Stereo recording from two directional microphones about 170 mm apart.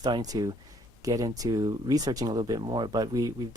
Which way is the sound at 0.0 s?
25° right (ahead or behind).